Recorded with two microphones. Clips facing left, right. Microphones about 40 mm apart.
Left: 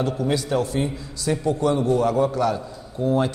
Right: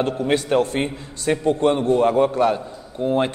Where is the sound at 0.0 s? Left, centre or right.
Right.